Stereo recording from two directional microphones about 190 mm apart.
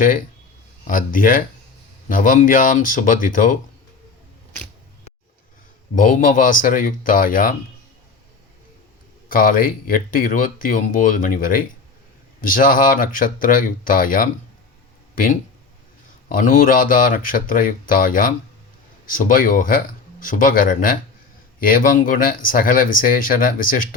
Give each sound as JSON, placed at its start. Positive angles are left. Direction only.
{"t": 0.9, "sound": "speech", "side_deg": 45}
{"t": 6.0, "sound": "speech", "side_deg": 45}
{"t": 9.3, "sound": "speech", "side_deg": 45}